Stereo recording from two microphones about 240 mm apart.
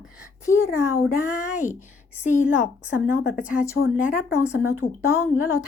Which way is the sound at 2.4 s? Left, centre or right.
Centre.